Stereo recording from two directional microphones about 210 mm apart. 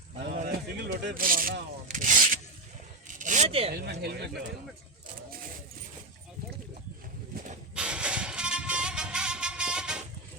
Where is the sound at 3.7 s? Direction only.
50° right (ahead or behind).